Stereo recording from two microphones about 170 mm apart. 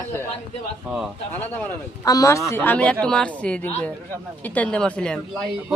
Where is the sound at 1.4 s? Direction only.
10° left (ahead or behind).